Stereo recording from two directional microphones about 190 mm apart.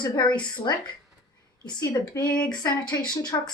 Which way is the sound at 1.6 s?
20° left (ahead or behind).